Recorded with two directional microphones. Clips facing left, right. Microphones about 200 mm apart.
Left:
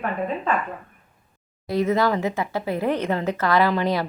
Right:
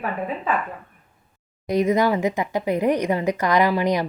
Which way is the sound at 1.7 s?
15° right (ahead or behind).